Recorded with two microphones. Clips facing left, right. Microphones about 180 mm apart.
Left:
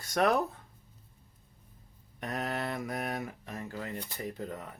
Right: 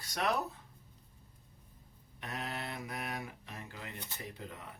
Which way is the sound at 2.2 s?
45° left (ahead or behind).